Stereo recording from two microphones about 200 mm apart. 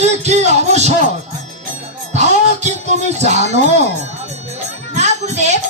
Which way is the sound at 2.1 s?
35° right (ahead or behind).